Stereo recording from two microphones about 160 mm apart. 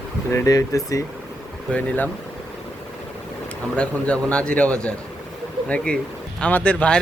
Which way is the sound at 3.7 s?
5° left (ahead or behind).